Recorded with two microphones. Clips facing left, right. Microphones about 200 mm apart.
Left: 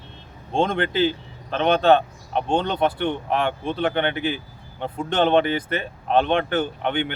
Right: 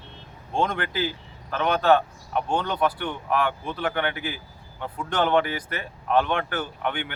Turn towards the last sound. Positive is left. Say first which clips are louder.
# left 5 dB
turn(degrees=25)  # may be behind; listen again after turning